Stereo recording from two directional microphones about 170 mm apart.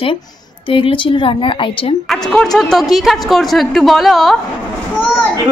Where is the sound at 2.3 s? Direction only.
5° left (ahead or behind).